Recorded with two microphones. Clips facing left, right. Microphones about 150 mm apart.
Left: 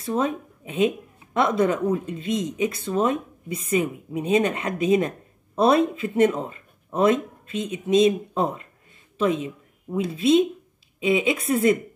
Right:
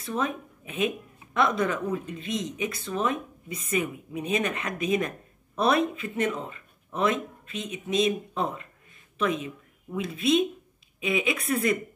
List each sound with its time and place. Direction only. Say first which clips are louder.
0.0 s a woman's voice: left 5 dB; 30° left (ahead or behind)
6.3 s a sound: left 5 dB; 40° left (ahead or behind)
7.7 s a woman's voice: left 7 dB; 35° left (ahead or behind)